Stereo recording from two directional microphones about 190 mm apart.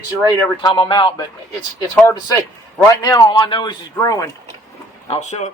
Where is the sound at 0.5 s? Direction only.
25° left (ahead or behind).